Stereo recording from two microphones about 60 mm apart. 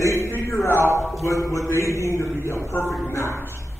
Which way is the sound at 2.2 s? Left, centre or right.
Left.